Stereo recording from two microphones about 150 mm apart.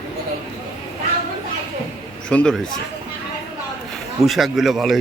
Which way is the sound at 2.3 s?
5° left (ahead or behind).